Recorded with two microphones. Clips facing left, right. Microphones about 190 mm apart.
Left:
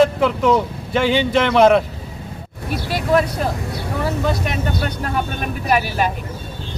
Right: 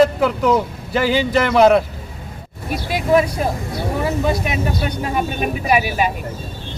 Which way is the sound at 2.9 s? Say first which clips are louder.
Right 2 dB; 10° right (ahead or behind).